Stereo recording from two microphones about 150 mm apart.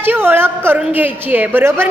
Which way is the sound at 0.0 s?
15° right (ahead or behind).